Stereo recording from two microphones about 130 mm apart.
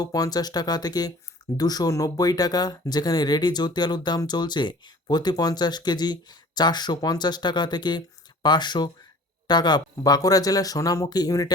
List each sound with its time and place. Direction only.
0.0 s speech: 30° left (ahead or behind)